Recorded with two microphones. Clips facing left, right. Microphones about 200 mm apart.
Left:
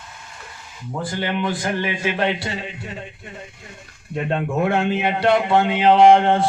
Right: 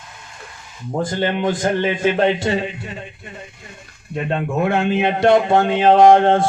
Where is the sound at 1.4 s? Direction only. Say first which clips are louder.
Right 4 dB; 45° right (ahead or behind).